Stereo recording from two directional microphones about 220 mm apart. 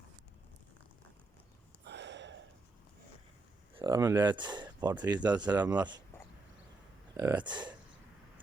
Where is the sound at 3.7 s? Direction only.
20° right (ahead or behind).